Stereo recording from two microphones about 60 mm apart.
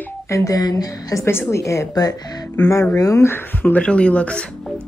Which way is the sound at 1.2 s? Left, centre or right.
Left.